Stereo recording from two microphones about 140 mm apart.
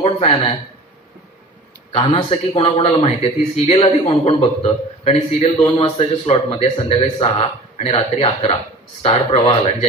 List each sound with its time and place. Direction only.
0.0 s speech: 40° left (ahead or behind)
1.9 s speech: 45° left (ahead or behind)